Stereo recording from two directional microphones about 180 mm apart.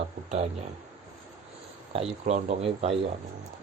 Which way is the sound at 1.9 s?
35° right (ahead or behind).